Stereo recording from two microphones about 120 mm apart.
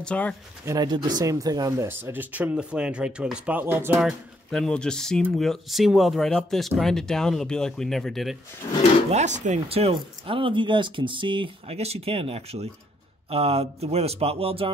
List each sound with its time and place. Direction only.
0.0 s speech: 10° left (ahead or behind)
0.7 s speech: 35° right (ahead or behind); by 3.9 s 15° right (ahead or behind)
3.9 s speech: 5° right (ahead or behind)
9.1 s speech: 85° right
9.7 s speech: 55° right (ahead or behind)